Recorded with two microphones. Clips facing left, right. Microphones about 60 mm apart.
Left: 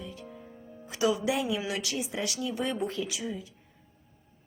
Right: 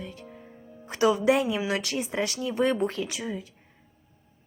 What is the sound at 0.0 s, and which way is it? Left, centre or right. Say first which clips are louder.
Music: right 2 dB; right.